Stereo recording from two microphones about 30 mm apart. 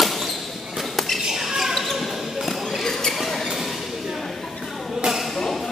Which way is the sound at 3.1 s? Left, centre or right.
Centre.